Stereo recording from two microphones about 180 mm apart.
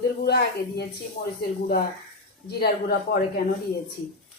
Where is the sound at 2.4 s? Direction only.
60° left (ahead or behind).